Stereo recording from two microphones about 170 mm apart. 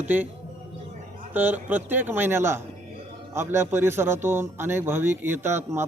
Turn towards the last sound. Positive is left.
turn(degrees=-15)  # may be behind; listen again after turning